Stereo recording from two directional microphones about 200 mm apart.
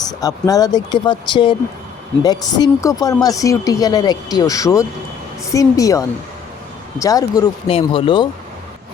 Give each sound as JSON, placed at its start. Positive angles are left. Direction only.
{"t": 0.2, "sound": "a woman's voice", "side_deg": 15}